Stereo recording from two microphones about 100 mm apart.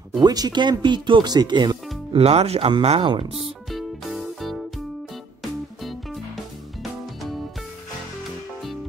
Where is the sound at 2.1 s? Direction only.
90° right; by 3.5 s 75° right (ahead or behind).